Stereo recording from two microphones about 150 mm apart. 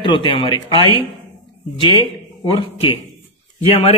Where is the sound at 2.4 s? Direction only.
35° left (ahead or behind).